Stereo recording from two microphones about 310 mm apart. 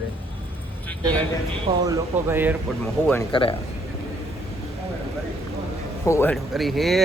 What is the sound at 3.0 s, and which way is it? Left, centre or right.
Speech, centre.